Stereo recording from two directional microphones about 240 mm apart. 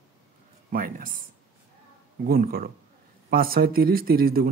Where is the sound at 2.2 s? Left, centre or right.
Right.